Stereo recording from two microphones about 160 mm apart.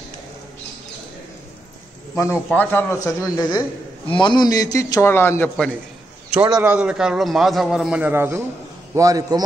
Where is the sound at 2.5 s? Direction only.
10° left (ahead or behind).